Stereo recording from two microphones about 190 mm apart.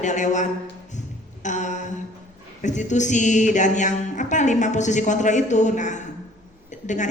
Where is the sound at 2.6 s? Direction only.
40° left (ahead or behind).